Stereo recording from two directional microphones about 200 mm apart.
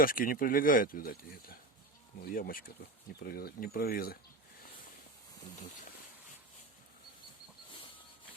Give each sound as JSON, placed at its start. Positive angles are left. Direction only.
{"t": 0.0, "sound": "speech", "side_deg": 45}